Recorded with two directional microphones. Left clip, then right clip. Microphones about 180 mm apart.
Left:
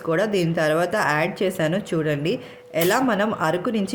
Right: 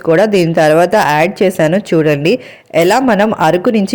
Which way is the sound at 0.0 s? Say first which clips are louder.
Right 12 dB; 40° right (ahead or behind).